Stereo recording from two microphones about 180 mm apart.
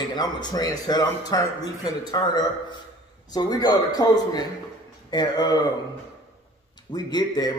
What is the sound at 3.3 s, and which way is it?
A man's voice, 20° left (ahead or behind).